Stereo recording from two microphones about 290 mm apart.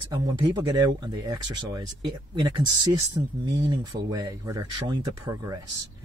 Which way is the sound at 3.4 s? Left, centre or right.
Right.